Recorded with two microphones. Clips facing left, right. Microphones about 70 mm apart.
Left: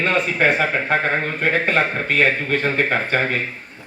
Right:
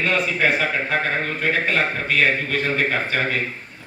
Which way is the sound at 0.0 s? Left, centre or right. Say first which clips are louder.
Left 2 dB; left.